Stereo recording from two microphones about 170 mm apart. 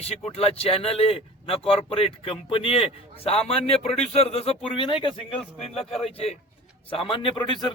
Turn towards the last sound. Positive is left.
turn(degrees=25)  # may be behind; listen again after turning